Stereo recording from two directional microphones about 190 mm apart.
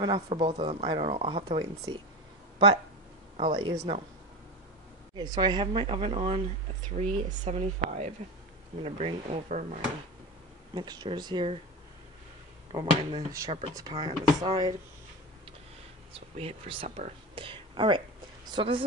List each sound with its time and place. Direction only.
0.0 s speech: 25° right (ahead or behind)
3.3 s speech: 25° right (ahead or behind)
5.1 s speech: 20° right (ahead or behind); by 9.7 s 40° right (ahead or behind)
10.7 s speech: 20° right (ahead or behind)
12.7 s speech: 20° right (ahead or behind)
16.1 s speech: 30° right (ahead or behind)